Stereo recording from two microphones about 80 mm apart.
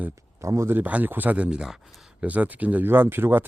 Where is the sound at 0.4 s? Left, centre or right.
Right.